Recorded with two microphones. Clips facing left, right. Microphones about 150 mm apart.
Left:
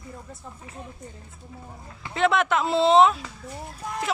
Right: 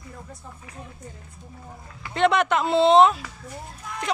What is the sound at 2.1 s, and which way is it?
Speech, centre (ahead or behind).